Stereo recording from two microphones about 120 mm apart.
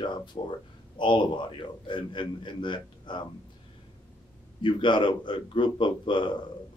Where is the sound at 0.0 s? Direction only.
40° left (ahead or behind).